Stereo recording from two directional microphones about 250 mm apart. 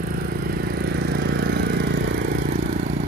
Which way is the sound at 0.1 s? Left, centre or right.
Right.